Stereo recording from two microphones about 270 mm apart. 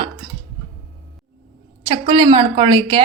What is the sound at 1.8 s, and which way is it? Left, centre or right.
A woman's voice, centre.